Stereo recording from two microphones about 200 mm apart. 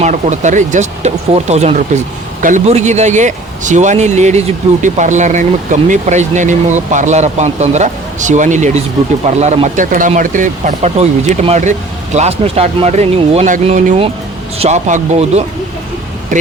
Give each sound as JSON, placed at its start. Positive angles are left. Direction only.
{"t": 0.0, "sound": "speech", "side_deg": -35}